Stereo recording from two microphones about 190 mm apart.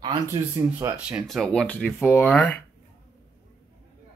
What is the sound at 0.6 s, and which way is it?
Speech, 15° right (ahead or behind).